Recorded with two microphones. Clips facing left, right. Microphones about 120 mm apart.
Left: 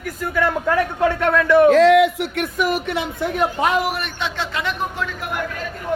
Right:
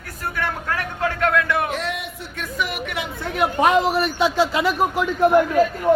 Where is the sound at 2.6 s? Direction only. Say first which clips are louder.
Left 5 dB; 40° left (ahead or behind).